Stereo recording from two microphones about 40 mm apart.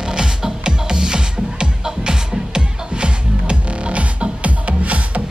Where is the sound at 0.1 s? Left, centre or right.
Centre.